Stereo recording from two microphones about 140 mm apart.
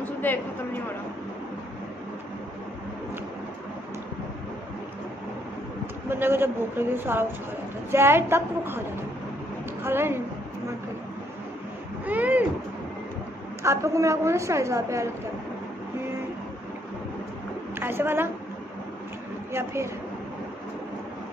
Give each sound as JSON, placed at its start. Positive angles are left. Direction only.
{"t": 0.0, "sound": "a sound", "side_deg": 15}
{"t": 6.0, "sound": "a woman's voice", "side_deg": -15}
{"t": 9.8, "sound": "a woman's voice", "side_deg": -15}
{"t": 12.1, "sound": "a sound", "side_deg": -10}
{"t": 13.6, "sound": "a woman's voice", "side_deg": -20}
{"t": 17.7, "sound": "a woman's voice", "side_deg": -15}
{"t": 19.5, "sound": "a woman's voice", "side_deg": -20}